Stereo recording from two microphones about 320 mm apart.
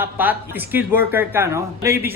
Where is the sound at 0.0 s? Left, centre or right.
Centre.